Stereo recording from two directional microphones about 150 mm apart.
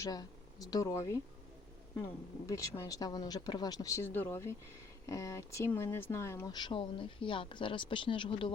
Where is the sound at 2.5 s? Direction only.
20° left (ahead or behind).